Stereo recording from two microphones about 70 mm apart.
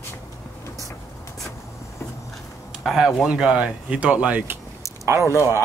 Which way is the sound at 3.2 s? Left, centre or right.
Centre.